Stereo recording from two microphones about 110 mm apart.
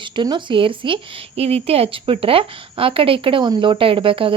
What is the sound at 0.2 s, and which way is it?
Speech, 45° right (ahead or behind).